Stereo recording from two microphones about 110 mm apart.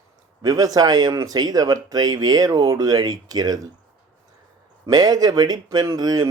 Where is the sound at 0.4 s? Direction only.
35° right (ahead or behind).